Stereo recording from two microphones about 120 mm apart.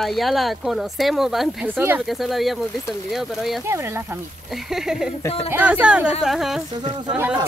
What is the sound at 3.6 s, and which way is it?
Speech, 20° right (ahead or behind).